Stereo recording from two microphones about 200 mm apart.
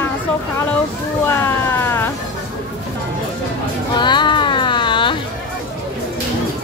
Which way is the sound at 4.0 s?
25° left (ahead or behind).